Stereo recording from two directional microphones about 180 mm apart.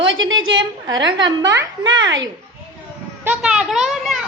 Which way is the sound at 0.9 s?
25° right (ahead or behind).